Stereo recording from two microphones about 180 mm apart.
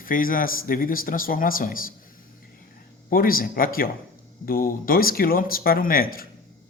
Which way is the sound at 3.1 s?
55° left (ahead or behind).